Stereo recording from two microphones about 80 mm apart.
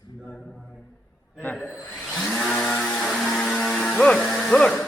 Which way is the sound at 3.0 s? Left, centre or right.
Centre.